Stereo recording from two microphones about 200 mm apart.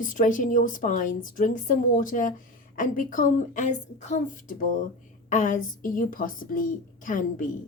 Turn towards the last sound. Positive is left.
turn(degrees=40)  # may be behind; listen again after turning